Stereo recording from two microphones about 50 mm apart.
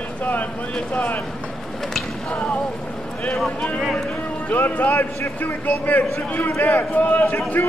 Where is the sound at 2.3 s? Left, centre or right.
Left.